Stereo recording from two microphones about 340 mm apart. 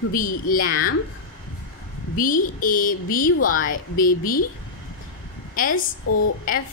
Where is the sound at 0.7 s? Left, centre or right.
Left.